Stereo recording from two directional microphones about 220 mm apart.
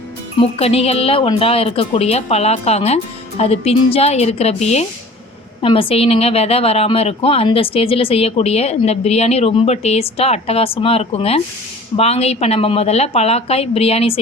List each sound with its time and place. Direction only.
0.6 s speech: 25° left (ahead or behind)